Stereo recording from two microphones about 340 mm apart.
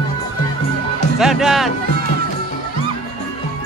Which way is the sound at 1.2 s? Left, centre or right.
Centre.